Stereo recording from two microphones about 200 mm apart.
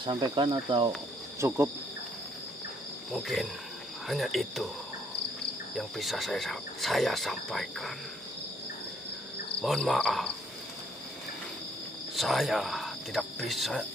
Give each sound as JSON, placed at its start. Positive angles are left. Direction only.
{"t": 0.0, "sound": "cricket", "side_deg": -25}
{"t": 3.1, "sound": "speech", "side_deg": 0}
{"t": 5.8, "sound": "speech", "side_deg": 0}
{"t": 9.6, "sound": "speech", "side_deg": 0}
{"t": 12.2, "sound": "speech", "side_deg": 0}